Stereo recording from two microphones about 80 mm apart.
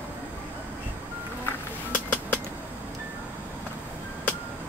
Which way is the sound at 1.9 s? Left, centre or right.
Centre.